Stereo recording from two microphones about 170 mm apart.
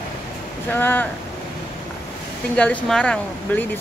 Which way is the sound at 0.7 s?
10° left (ahead or behind).